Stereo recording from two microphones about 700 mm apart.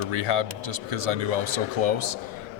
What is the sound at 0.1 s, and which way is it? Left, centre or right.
A man's voice, right.